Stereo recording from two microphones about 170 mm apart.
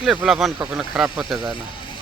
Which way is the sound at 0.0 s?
Centre (ahead or behind).